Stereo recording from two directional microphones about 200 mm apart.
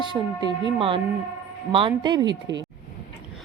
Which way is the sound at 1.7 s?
25° right (ahead or behind).